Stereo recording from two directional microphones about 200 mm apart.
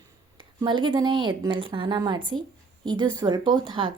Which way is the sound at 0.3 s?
25° right (ahead or behind).